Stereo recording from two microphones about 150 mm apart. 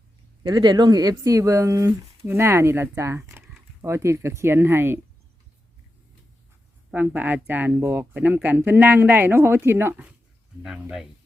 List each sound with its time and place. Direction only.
0.4 s speech: 30° right (ahead or behind)
6.9 s speech: 10° right (ahead or behind)